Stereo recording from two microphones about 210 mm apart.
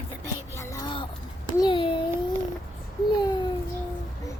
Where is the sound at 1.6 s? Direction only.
25° left (ahead or behind).